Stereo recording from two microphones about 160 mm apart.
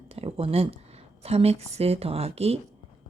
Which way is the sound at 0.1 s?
35° right (ahead or behind).